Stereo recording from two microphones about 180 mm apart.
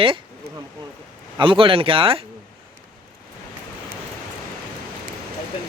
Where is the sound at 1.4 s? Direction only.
30° right (ahead or behind).